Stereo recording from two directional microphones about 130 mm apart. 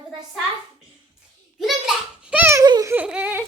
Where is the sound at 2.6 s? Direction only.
30° right (ahead or behind).